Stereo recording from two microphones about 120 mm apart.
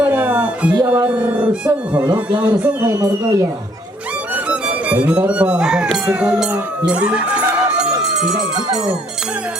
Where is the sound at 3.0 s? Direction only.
30° right (ahead or behind).